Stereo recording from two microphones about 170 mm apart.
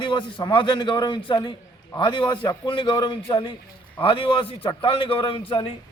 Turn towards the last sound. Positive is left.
turn(degrees=30)  # may be behind; listen again after turning